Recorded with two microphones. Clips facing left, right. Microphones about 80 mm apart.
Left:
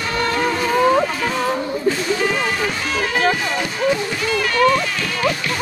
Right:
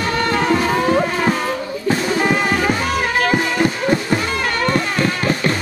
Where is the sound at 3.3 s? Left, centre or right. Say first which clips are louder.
Right 4 dB; right.